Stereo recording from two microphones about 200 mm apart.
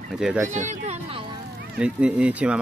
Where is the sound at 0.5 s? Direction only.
35° right (ahead or behind).